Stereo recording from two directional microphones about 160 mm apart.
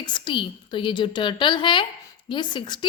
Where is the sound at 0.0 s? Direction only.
30° left (ahead or behind).